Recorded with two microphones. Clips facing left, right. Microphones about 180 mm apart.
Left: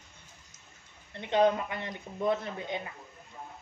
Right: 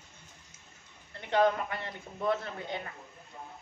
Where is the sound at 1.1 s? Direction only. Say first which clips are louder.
Left 1 dB; 20° left (ahead or behind).